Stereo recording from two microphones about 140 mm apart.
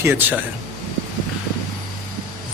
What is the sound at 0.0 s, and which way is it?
Speech, 15° right (ahead or behind).